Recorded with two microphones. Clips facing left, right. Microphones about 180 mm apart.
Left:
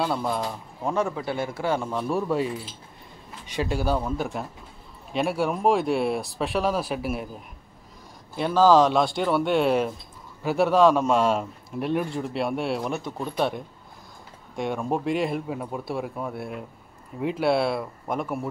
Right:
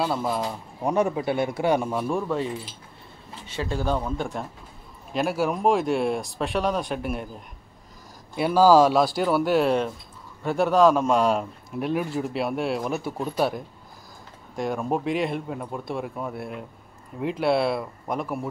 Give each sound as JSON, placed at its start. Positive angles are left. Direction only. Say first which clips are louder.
{"t": 0.0, "sound": "a man's voice", "louder": "right 1 dB", "side_deg": 0}
{"t": 0.8, "sound": "speech", "louder": "right 3 dB", "side_deg": -15}
{"t": 2.0, "sound": "speech", "louder": "left 1 dB", "side_deg": 5}
{"t": 3.4, "sound": "a man's voice", "louder": "left 1 dB", "side_deg": 15}
{"t": 8.4, "sound": "a man's voice", "louder": "right 1 dB", "side_deg": -10}
{"t": 14.5, "sound": "a man's voice", "louder": "right 1 dB", "side_deg": 0}